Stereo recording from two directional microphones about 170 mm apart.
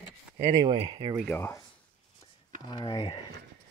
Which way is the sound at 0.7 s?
35° right (ahead or behind).